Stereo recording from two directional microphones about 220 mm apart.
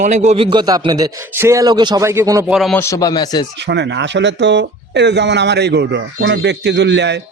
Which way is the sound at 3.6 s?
50° right (ahead or behind).